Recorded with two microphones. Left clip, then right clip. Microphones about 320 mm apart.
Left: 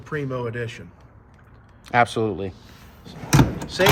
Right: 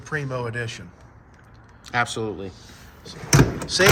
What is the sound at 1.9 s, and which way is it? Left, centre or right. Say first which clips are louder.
Speech: left 5 dB; centre.